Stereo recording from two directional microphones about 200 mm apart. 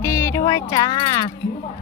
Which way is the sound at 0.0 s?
15° left (ahead or behind).